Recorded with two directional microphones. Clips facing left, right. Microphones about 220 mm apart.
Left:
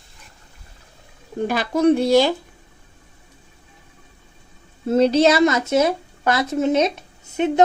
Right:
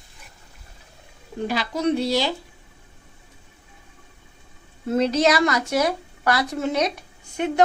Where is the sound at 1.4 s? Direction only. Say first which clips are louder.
Left 6 dB; 50° left (ahead or behind).